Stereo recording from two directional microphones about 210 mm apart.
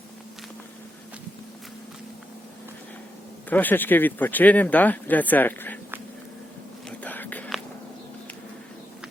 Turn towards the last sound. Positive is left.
turn(degrees=5)  # may be behind; listen again after turning